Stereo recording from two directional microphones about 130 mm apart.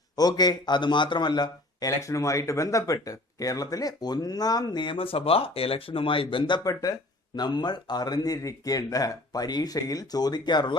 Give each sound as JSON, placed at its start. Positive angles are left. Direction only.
{"t": 0.2, "sound": "a man's voice", "side_deg": 30}